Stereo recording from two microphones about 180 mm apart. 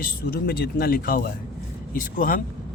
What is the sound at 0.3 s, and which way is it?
Speech, 60° left (ahead or behind).